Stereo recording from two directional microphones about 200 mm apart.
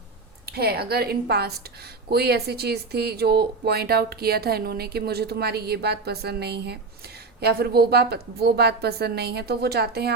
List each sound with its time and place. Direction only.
0.4 s speech: 50° right (ahead or behind)